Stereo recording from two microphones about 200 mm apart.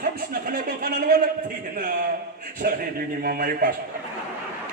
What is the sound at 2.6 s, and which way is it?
A man's voice, 50° right (ahead or behind).